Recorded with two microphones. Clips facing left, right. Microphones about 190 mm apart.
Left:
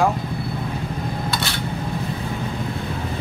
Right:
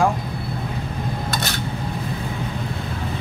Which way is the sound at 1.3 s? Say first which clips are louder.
Even; 45° right (ahead or behind).